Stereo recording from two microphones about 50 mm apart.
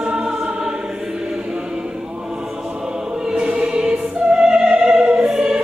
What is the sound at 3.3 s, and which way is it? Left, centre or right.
Choir, centre.